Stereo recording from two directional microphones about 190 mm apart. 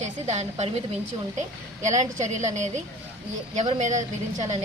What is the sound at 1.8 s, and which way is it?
Speech, 40° right (ahead or behind).